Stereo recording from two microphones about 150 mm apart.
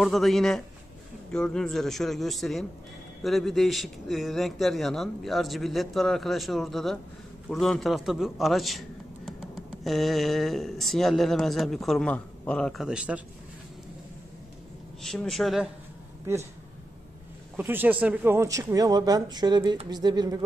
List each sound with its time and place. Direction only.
0.0 s a man's voice: centre (ahead or behind)
12.8 s a man's voice: 5° right (ahead or behind)
15.0 s speech: centre (ahead or behind)
17.6 s speech: 10° right (ahead or behind); by 20.3 s 25° right (ahead or behind)